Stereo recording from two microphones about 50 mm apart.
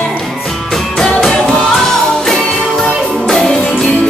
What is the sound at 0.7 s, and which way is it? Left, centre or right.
Music, centre.